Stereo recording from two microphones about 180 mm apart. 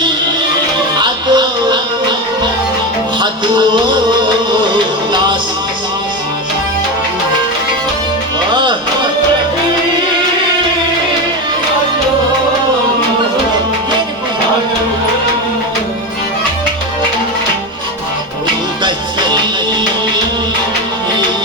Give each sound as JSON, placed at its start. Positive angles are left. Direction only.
{"t": 0.9, "sound": "music", "side_deg": -25}
{"t": 8.4, "sound": "music", "side_deg": -25}